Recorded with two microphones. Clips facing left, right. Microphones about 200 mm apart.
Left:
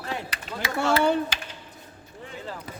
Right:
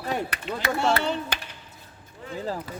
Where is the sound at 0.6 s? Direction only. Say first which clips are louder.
Right 4 dB; 60° right (ahead or behind).